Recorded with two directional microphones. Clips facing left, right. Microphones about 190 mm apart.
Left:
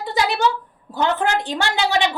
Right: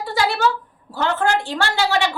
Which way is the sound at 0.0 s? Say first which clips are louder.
Even; 20° left (ahead or behind).